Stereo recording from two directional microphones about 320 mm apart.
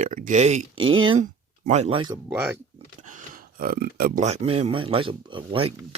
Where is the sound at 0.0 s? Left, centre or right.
Right; by 2.6 s centre.